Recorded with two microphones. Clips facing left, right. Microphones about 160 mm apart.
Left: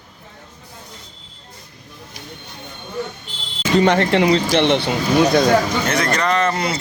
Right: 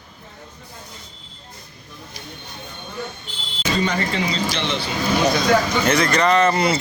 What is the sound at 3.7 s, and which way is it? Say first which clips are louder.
Speech: left 8 dB; 70° left (ahead or behind).